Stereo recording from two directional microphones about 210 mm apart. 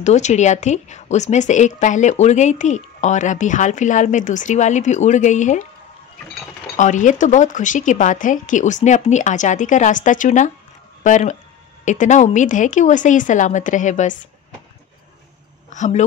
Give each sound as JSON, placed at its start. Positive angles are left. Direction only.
{"t": 0.0, "sound": "a woman's voice", "side_deg": 35}
{"t": 6.8, "sound": "a woman's voice", "side_deg": 35}
{"t": 15.7, "sound": "speech", "side_deg": 35}